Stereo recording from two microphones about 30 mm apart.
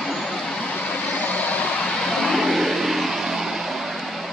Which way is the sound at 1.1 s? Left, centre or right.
Left.